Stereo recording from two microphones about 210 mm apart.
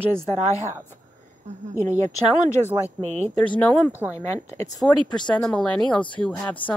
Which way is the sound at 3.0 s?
30° right (ahead or behind).